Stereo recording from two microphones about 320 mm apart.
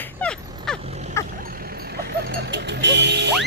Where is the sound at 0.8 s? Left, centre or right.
Centre.